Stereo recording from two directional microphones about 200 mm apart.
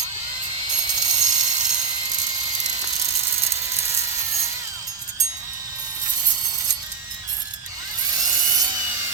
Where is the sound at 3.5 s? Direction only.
15° right (ahead or behind).